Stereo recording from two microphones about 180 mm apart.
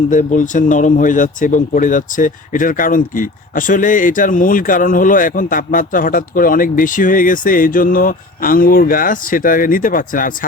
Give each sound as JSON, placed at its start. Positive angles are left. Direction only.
{"t": 0.1, "sound": "speech", "side_deg": 45}